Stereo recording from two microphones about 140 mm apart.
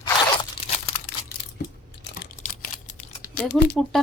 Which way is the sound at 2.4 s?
70° left (ahead or behind).